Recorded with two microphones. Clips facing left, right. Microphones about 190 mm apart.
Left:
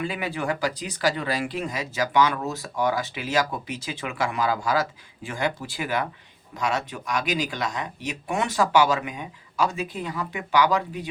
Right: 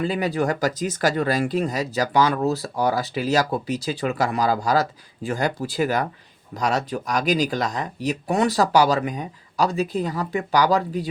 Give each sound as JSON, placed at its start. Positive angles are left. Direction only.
{"t": 0.0, "sound": "speech", "side_deg": -40}